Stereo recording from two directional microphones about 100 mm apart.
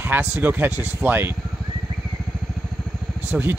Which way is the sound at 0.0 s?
20° right (ahead or behind).